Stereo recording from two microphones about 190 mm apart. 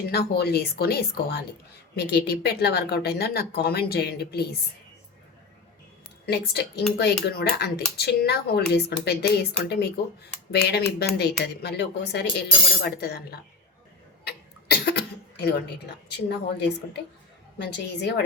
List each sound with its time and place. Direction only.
0.1 s speech: 55° left (ahead or behind)
6.2 s speech: 60° left (ahead or behind)
14.3 s cough: 60° left (ahead or behind)
15.4 s speech: 60° left (ahead or behind)